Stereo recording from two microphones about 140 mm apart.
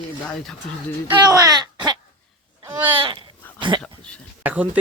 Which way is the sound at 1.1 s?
25° right (ahead or behind).